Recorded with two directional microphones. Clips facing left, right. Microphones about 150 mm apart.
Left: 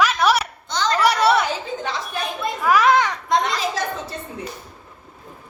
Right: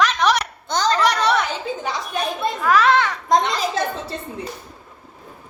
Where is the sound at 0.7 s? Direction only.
55° right (ahead or behind).